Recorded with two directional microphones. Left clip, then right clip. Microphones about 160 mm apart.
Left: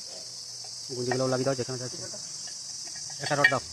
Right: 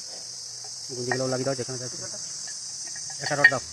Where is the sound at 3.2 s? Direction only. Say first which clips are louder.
Right 4 dB; 10° left (ahead or behind).